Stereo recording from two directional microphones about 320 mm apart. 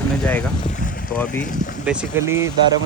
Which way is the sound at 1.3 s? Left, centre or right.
Left.